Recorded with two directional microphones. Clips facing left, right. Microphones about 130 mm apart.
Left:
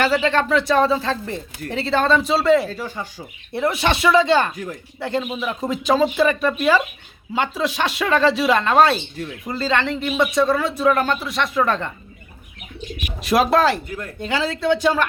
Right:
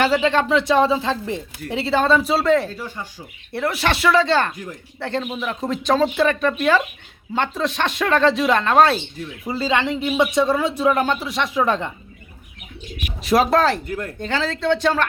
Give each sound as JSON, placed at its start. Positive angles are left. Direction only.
{"t": 0.0, "sound": "speech", "side_deg": -15}
{"t": 2.6, "sound": "speech", "side_deg": 90}
{"t": 3.5, "sound": "speech", "side_deg": 20}
{"t": 9.5, "sound": "speech", "side_deg": -10}
{"t": 13.2, "sound": "speech", "side_deg": 0}